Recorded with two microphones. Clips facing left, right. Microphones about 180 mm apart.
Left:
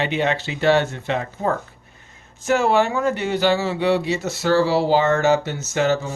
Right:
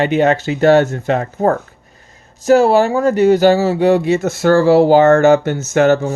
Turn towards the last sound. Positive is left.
turn(degrees=-50)  # may be behind; listen again after turning